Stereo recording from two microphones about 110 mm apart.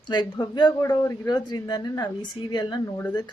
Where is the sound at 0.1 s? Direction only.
40° left (ahead or behind).